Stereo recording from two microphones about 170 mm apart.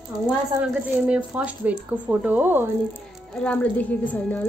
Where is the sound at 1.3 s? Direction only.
10° right (ahead or behind).